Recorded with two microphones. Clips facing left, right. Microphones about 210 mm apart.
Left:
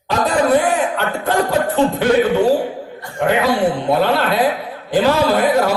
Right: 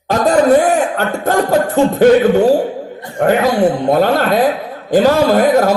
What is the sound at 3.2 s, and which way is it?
A man's voice, 45° right (ahead or behind).